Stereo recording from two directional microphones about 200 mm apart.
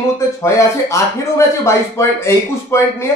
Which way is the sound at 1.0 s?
15° left (ahead or behind).